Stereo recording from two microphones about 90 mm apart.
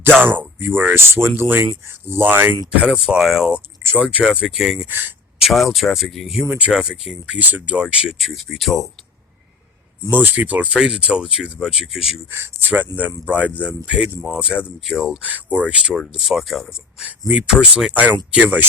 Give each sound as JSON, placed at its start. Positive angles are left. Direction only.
{"t": 0.2, "sound": "speech", "side_deg": -20}
{"t": 2.8, "sound": "speech", "side_deg": -5}
{"t": 4.9, "sound": "speech", "side_deg": -20}
{"t": 5.4, "sound": "speech", "side_deg": 0}
{"t": 7.3, "sound": "speech", "side_deg": -15}
{"t": 10.2, "sound": "speech", "side_deg": -20}
{"t": 12.3, "sound": "speech", "side_deg": -20}
{"t": 15.2, "sound": "speech", "side_deg": -20}
{"t": 16.1, "sound": "speech", "side_deg": -5}